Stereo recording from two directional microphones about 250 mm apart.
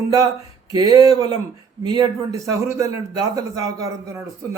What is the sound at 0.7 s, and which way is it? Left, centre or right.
A man's voice, centre.